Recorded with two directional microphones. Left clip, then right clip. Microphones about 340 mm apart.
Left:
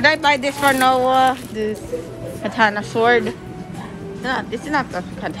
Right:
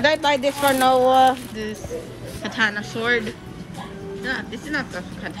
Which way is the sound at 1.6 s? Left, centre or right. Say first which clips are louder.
Left 6 dB; centre.